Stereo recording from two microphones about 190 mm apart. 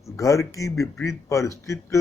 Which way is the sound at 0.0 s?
15° left (ahead or behind).